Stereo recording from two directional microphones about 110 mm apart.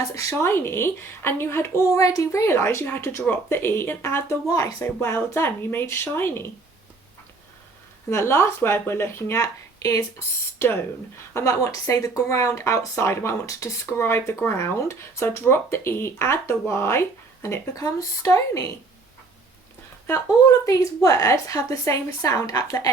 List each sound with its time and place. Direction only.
0.1 s speech: 30° left (ahead or behind)
8.1 s speech: 25° left (ahead or behind)
11.3 s speech: 30° left (ahead or behind)
20.7 s a woman's voice: 30° left (ahead or behind)